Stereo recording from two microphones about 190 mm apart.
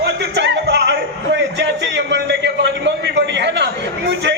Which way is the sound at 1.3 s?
65° right (ahead or behind).